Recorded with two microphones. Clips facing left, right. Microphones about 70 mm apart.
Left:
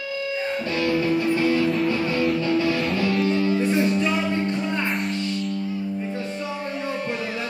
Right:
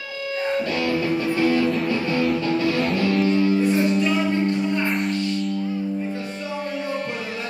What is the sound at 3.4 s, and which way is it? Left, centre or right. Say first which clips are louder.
Music: right 2 dB; centre.